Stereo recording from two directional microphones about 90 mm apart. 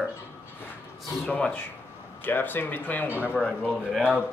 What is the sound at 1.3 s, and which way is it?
Speech, 20° left (ahead or behind).